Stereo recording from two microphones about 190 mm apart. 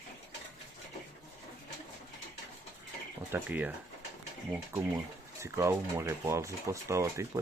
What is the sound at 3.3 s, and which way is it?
Speech, 10° right (ahead or behind).